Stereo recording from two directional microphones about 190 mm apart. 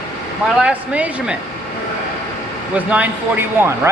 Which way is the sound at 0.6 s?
5° right (ahead or behind).